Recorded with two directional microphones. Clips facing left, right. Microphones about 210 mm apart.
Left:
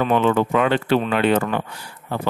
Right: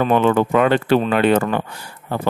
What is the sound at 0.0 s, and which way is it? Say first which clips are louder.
Speech: right 2 dB; 50° right (ahead or behind).